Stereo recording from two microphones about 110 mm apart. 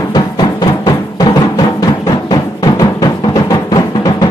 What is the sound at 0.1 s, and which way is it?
Music, 40° left (ahead or behind).